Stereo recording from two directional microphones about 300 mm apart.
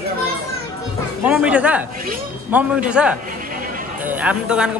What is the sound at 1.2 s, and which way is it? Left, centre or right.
A man's voice, centre.